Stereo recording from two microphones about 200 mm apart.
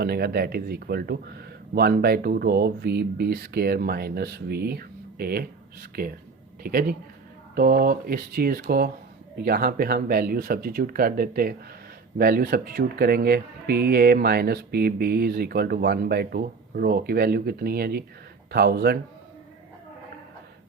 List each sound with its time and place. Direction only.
0.0 s speech: 50° right (ahead or behind)